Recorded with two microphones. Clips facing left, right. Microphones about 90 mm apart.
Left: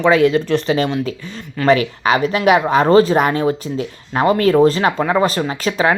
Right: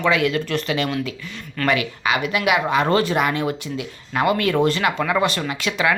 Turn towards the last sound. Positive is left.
turn(degrees=35)  # may be behind; listen again after turning